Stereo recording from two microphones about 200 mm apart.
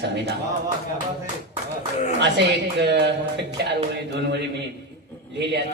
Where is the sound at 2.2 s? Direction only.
60° right (ahead or behind).